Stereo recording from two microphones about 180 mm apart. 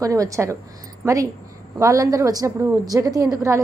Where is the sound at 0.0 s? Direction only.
20° right (ahead or behind).